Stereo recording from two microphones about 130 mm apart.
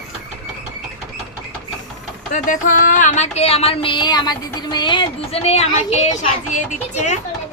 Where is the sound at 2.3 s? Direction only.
80° left; by 7.2 s 65° left (ahead or behind).